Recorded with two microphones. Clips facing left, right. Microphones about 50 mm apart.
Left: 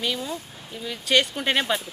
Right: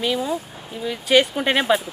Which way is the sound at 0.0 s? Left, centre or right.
Centre.